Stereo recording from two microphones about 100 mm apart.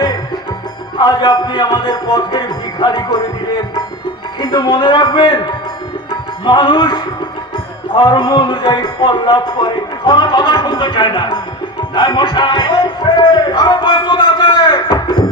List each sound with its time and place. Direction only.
0.9 s a man's voice: 45° left (ahead or behind)
4.4 s a man's voice: 45° left (ahead or behind)